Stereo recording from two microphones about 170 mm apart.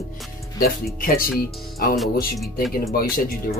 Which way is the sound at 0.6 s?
60° left (ahead or behind).